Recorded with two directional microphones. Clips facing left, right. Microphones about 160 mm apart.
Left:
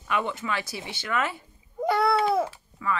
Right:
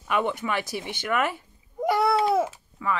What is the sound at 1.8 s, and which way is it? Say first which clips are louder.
Babbling: right 1 dB; 20° right (ahead or behind).